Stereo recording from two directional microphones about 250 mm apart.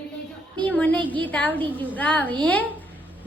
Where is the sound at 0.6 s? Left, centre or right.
Centre.